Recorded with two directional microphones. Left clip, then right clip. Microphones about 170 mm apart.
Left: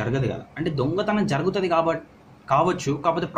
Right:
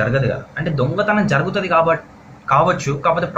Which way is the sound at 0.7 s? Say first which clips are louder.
Right 7 dB; 65° left (ahead or behind).